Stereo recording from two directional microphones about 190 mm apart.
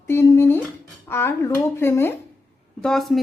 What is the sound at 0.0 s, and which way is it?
Humming, 15° left (ahead or behind).